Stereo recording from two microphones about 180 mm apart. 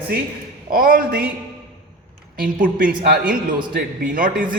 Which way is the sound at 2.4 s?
50° right (ahead or behind).